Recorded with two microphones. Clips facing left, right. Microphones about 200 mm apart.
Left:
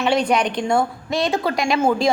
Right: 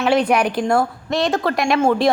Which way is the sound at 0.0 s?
5° right (ahead or behind).